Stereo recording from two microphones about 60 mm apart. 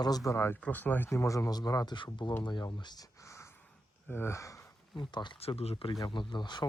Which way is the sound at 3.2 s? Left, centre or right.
Left.